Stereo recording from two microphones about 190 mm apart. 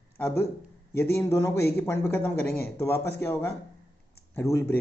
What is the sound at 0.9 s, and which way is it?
A man's voice, 15° left (ahead or behind).